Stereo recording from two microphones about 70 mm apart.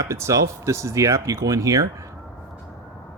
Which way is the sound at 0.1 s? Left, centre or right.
Right.